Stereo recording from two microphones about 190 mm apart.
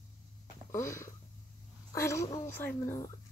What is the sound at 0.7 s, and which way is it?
Speech, 15° left (ahead or behind).